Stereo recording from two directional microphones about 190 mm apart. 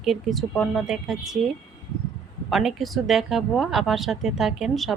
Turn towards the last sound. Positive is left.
turn(degrees=0)  # may be behind; listen again after turning